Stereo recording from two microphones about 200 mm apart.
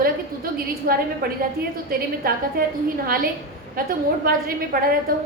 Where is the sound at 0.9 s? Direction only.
50° right (ahead or behind).